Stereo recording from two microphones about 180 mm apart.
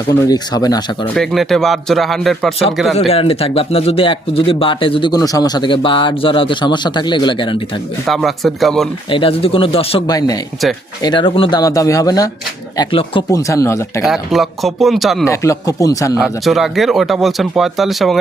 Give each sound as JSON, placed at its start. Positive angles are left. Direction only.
{"t": 0.3, "sound": "speech", "side_deg": 20}
{"t": 1.0, "sound": "speech", "side_deg": 5}
{"t": 3.1, "sound": "speech", "side_deg": 30}
{"t": 8.0, "sound": "speech", "side_deg": 0}
{"t": 9.0, "sound": "speech", "side_deg": 30}
{"t": 13.5, "sound": "a man's voice", "side_deg": 15}
{"t": 14.0, "sound": "speech", "side_deg": 0}
{"t": 15.2, "sound": "a man's voice", "side_deg": 15}
{"t": 16.2, "sound": "speech", "side_deg": 0}